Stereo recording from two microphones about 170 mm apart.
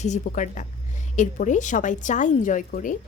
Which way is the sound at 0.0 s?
45° left (ahead or behind).